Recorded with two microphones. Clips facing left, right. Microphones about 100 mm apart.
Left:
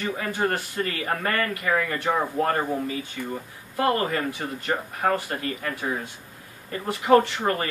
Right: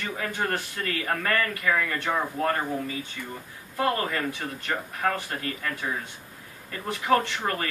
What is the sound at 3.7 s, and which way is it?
Speech, 20° left (ahead or behind).